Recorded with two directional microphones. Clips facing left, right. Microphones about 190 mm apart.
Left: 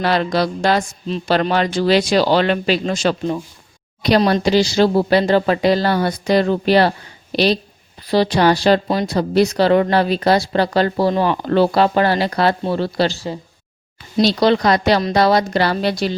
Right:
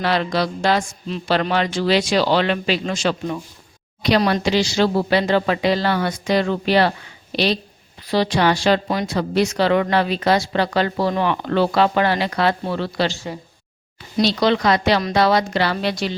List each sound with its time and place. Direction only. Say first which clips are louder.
0.0 s speech: left 3 dB; 40° left (ahead or behind)